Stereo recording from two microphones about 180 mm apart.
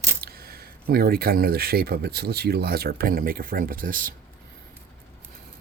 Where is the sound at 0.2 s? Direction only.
60° right (ahead or behind).